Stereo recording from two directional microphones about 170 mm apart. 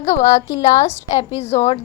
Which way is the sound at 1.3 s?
40° left (ahead or behind).